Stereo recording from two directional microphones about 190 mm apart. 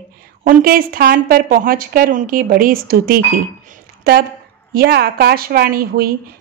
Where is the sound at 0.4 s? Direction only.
45° right (ahead or behind).